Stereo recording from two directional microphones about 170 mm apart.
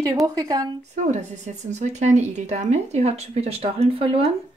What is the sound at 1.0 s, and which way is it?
Speech, 45° right (ahead or behind).